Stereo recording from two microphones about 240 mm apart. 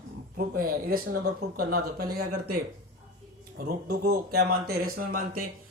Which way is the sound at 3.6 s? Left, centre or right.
Right.